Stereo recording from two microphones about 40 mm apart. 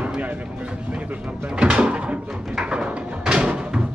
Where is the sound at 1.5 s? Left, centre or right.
Right.